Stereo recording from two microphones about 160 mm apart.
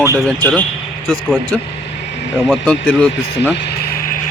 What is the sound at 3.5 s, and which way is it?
Music, 80° left.